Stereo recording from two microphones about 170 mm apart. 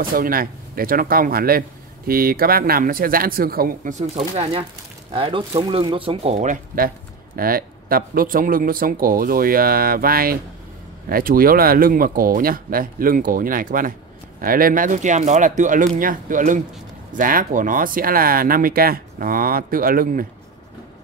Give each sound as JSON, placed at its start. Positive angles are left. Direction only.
{"t": 0.1, "sound": "speech", "side_deg": -60}
{"t": 4.0, "sound": "speech", "side_deg": -40}